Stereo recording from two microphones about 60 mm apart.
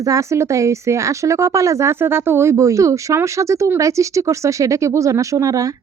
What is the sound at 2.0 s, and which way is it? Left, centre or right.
Speech, right.